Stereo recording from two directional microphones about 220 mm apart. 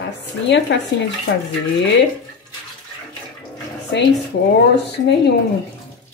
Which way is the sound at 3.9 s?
55° left (ahead or behind).